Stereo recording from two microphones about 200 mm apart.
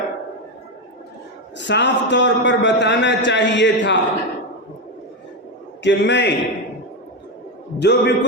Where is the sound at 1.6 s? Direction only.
60° left (ahead or behind).